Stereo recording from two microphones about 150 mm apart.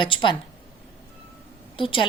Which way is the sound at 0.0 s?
30° left (ahead or behind).